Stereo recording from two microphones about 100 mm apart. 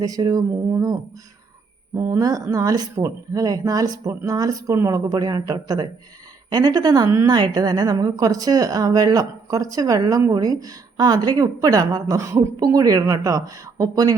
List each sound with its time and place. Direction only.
0.0 s a woman's voice: 40° right (ahead or behind)
2.0 s a woman's voice: 35° right (ahead or behind)